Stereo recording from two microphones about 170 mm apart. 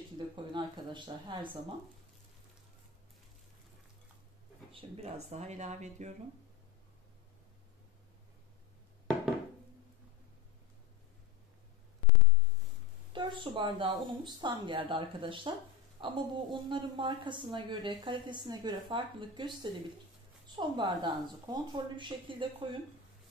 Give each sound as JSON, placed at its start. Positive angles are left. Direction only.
{"t": 0.2, "sound": "speech", "side_deg": -25}
{"t": 4.7, "sound": "speech", "side_deg": -35}
{"t": 13.1, "sound": "a woman's voice", "side_deg": -30}